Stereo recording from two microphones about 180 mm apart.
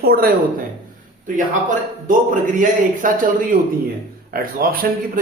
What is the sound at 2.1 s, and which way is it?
A man's voice, 45° right (ahead or behind).